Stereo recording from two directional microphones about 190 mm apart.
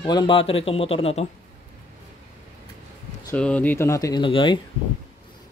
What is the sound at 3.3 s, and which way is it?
Speech, 5° left (ahead or behind).